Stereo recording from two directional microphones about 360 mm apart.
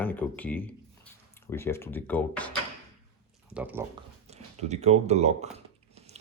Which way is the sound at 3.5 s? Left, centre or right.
Centre.